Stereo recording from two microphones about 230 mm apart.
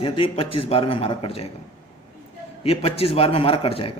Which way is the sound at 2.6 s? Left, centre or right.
Left.